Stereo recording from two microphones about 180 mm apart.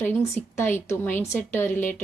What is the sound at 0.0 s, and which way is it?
A woman's voice, 10° left (ahead or behind).